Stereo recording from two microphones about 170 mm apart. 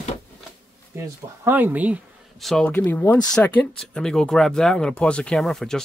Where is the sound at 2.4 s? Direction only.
5° left (ahead or behind).